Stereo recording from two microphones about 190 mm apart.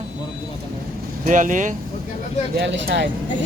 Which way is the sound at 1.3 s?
40° right (ahead or behind).